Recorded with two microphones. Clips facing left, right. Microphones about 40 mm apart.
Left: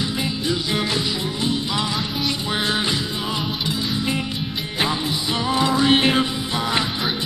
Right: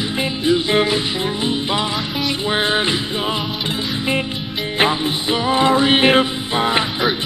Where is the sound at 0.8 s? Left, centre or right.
Right.